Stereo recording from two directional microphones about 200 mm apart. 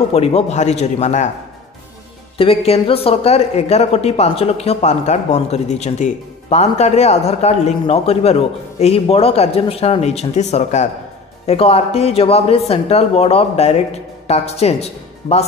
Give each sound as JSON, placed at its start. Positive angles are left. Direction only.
{"t": 0.1, "sound": "a woman's voice", "side_deg": 30}
{"t": 2.3, "sound": "a woman's voice", "side_deg": 30}